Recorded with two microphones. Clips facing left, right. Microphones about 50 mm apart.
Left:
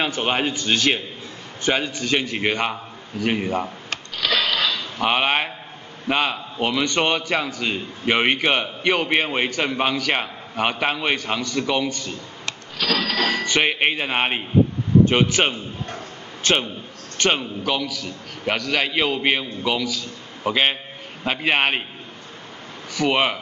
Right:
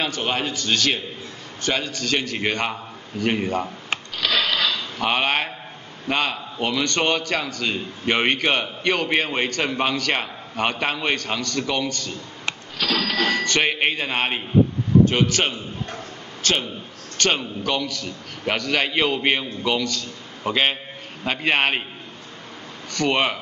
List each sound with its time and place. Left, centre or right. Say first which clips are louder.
0.0 s a man's voice: left 2 dB; centre
4.2 s mechanisms: even; centre
4.9 s a man's voice: left 2 dB; centre
12.8 s a man's voice: left 1 dB; centre
13.2 s a man's voice: even; centre
17.2 s a man's voice: left 1 dB; centre
22.9 s a man's voice: left 1 dB; centre